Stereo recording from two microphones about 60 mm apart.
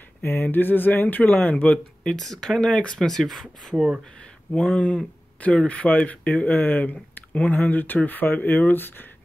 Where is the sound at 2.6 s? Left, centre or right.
Centre.